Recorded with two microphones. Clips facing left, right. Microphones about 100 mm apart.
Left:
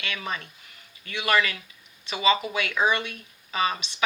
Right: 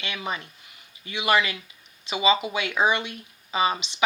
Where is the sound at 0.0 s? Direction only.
20° right (ahead or behind).